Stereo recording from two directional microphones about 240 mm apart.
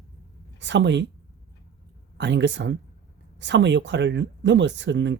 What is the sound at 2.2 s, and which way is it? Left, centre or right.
Speech, right.